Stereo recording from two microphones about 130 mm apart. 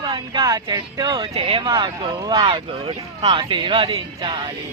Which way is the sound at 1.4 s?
45° right (ahead or behind).